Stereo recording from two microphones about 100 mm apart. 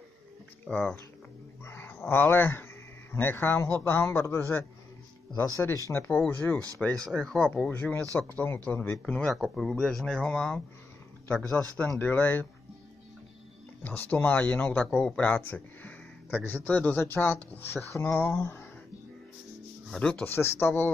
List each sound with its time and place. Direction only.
0.7 s speech: 10° left (ahead or behind)
1.6 s speech: 25° left (ahead or behind); by 7.7 s 5° left (ahead or behind)
8.2 s speech: 20° left (ahead or behind)
9.0 s speech: 10° left (ahead or behind)
9.3 s speech: centre (ahead or behind); by 12.4 s 15° left (ahead or behind)
13.8 s speech: 20° left (ahead or behind)
19.9 s speech: 10° left (ahead or behind)
20.2 s speech: 25° left (ahead or behind)